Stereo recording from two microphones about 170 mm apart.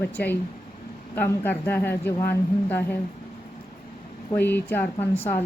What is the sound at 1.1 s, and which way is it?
A woman's voice, 10° left (ahead or behind).